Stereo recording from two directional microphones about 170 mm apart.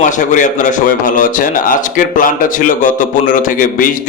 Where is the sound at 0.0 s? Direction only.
45° left (ahead or behind).